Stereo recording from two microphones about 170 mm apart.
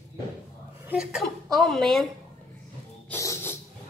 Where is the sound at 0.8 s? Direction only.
5° right (ahead or behind).